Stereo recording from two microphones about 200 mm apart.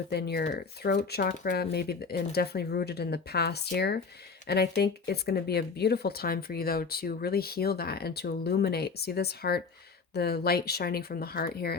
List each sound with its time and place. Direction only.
0.1 s speech: 55° left (ahead or behind)